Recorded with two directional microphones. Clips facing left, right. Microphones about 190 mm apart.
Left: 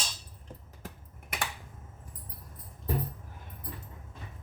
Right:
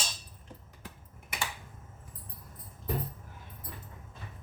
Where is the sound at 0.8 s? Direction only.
55° left (ahead or behind).